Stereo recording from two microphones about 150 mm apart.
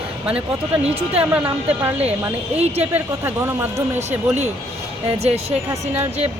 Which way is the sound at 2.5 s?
45° right (ahead or behind).